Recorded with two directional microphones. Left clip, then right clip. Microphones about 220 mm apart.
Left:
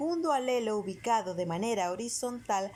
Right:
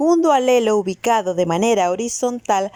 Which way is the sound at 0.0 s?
40° right (ahead or behind).